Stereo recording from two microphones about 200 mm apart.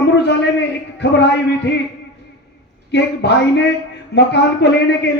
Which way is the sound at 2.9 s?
60° left (ahead or behind).